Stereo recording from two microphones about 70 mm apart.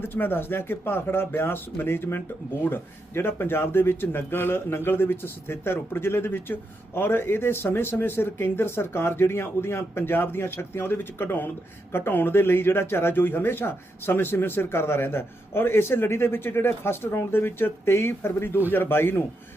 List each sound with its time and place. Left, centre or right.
0.0 s speech: left